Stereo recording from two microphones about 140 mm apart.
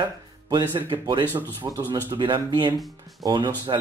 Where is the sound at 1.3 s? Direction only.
15° right (ahead or behind).